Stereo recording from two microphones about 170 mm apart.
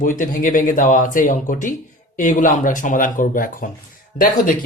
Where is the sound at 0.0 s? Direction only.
50° left (ahead or behind).